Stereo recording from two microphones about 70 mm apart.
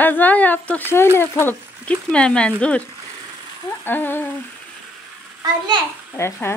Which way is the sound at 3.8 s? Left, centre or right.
Left.